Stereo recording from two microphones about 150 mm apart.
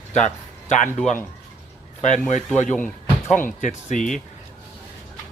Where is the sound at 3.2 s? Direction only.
60° left (ahead or behind).